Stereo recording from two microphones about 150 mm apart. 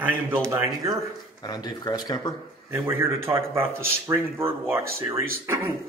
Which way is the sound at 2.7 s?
15° right (ahead or behind).